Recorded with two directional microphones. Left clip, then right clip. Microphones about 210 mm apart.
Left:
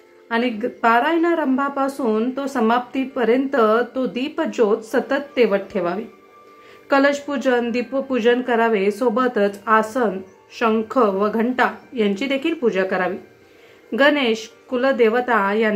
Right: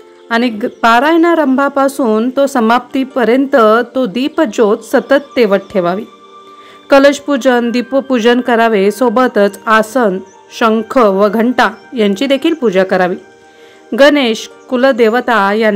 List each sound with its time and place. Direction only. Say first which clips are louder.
0.3 s a woman's voice: right 7 dB; 40° right (ahead or behind)